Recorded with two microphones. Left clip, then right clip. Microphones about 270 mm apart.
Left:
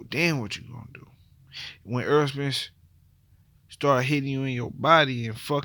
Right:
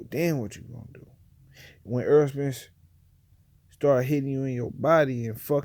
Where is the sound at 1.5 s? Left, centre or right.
Centre.